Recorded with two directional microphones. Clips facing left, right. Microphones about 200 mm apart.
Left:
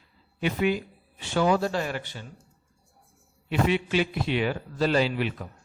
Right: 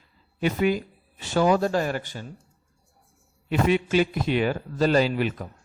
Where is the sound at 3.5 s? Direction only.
45° right (ahead or behind).